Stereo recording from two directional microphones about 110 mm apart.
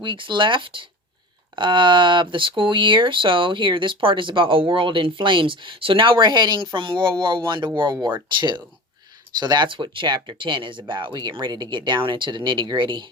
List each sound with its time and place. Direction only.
0.0 s speech: 45° right (ahead or behind)